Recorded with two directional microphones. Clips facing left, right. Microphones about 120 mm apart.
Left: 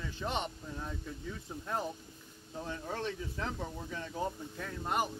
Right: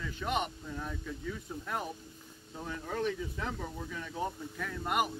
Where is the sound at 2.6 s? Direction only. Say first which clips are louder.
Right 4 dB; 30° left (ahead or behind).